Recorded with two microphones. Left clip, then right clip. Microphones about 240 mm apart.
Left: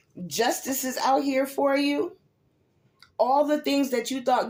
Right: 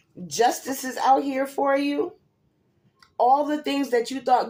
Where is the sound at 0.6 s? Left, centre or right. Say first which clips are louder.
Right 2 dB; left.